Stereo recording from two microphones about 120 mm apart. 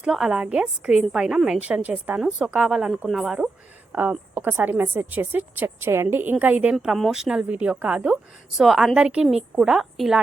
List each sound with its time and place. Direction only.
0.0 s a woman's voice: 5° right (ahead or behind)
3.9 s a woman's voice: 15° right (ahead or behind)
6.7 s a woman's voice: centre (ahead or behind)